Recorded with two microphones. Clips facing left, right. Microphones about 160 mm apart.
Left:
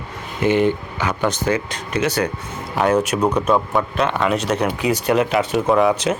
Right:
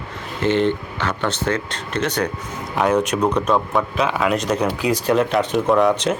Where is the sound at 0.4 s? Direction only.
10° left (ahead or behind).